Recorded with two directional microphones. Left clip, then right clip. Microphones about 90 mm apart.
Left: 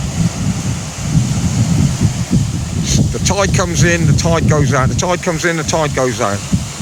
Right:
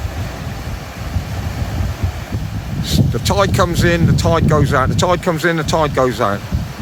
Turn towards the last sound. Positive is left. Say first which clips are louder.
# even
turn(degrees=-10)  # may be behind; listen again after turning